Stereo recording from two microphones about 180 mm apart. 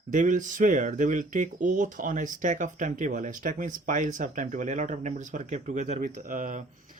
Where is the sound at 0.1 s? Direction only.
45° right (ahead or behind).